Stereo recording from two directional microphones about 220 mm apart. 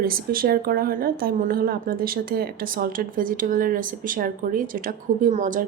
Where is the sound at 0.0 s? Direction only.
40° right (ahead or behind).